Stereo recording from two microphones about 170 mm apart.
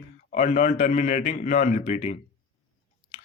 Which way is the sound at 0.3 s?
45° left (ahead or behind).